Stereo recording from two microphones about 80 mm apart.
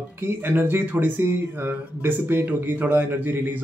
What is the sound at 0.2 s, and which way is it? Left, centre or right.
Speech, right.